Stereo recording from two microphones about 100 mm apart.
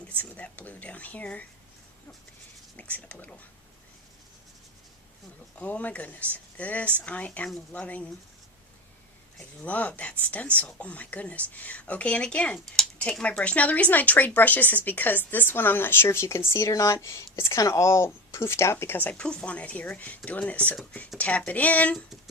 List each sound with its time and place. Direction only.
0.2 s speech: 15° left (ahead or behind)
2.7 s speech: 15° left (ahead or behind)
5.5 s speech: 15° left (ahead or behind)
9.6 s speech: 15° left (ahead or behind)
13.0 s speech: 10° left (ahead or behind)